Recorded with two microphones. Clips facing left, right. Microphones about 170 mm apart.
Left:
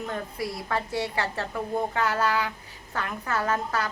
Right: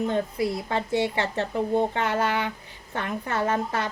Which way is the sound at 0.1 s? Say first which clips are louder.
Right 6 dB; 25° right (ahead or behind).